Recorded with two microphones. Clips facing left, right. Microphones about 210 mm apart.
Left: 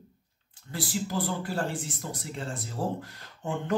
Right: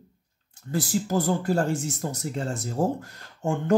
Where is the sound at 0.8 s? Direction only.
45° right (ahead or behind).